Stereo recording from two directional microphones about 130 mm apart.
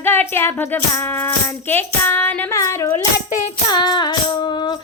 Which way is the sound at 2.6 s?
25° left (ahead or behind).